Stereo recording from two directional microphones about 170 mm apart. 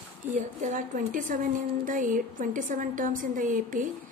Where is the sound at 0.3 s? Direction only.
50° right (ahead or behind).